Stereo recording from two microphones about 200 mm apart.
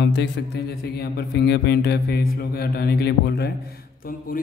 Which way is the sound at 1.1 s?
55° left (ahead or behind).